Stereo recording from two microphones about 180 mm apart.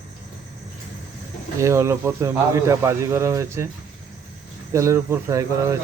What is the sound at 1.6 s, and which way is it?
Speech, 15° right (ahead or behind).